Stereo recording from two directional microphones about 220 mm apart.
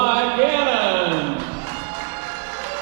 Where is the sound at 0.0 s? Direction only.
15° right (ahead or behind).